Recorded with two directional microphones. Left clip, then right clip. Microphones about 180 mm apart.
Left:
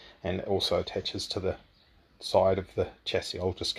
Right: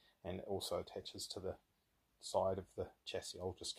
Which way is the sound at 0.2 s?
5° left (ahead or behind).